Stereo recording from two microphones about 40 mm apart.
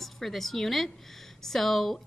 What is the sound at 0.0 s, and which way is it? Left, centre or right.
A woman's voice, centre.